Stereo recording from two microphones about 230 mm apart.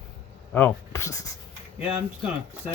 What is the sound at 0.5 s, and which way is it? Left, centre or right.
Speech, centre.